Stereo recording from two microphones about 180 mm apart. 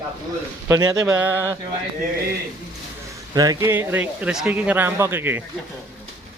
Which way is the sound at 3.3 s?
20° right (ahead or behind).